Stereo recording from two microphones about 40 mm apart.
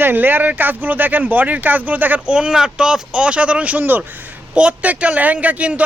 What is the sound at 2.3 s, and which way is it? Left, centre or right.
Speech, right.